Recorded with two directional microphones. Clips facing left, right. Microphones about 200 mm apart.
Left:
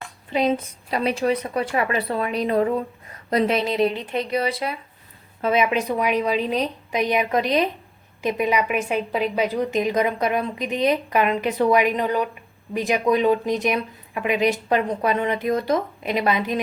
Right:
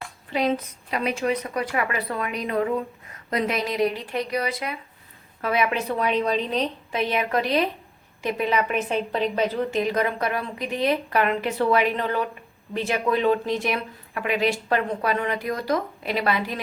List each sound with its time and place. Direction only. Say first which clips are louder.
0.3 s a woman's voice: left 2 dB; 20° left (ahead or behind)
0.9 s a woman's voice: left 3 dB; 35° left (ahead or behind)